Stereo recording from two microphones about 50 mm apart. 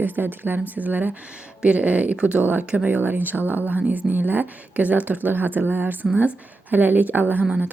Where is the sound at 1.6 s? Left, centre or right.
Right.